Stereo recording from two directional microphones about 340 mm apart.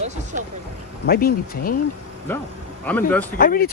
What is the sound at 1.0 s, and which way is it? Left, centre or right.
Speech, left.